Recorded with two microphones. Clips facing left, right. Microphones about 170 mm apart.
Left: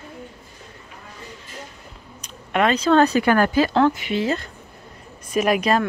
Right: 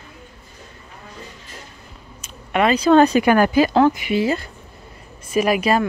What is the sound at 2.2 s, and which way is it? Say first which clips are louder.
Speech: right 2 dB; 5° right (ahead or behind).